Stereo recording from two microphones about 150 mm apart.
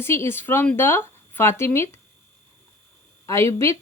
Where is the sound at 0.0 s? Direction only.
15° left (ahead or behind).